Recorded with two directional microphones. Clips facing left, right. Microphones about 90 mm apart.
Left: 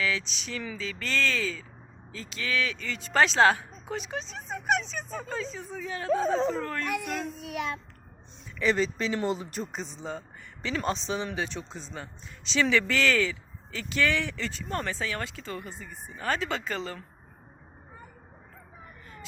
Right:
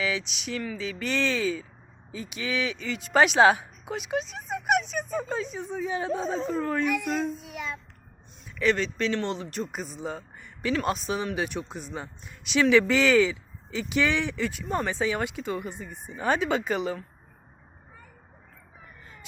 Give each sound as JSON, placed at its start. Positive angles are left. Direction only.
{"t": 0.0, "sound": "speech", "side_deg": -10}
{"t": 7.4, "sound": "child singing", "side_deg": 75}
{"t": 8.5, "sound": "speech", "side_deg": 0}